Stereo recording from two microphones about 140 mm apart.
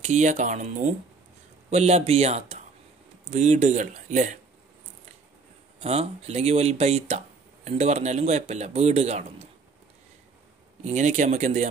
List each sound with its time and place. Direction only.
0.0 s speech: 55° right (ahead or behind)
5.8 s speech: 50° right (ahead or behind)
10.8 s speech: 55° right (ahead or behind)